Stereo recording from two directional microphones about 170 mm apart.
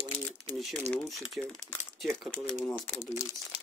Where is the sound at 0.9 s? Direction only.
Centre (ahead or behind).